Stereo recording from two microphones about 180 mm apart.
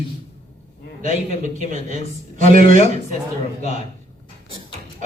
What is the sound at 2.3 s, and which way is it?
Speech, 45° right (ahead or behind).